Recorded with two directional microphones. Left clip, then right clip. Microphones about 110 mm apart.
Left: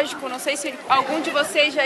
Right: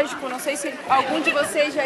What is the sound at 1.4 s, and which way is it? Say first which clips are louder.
Speech: left 2 dB; 15° left (ahead or behind).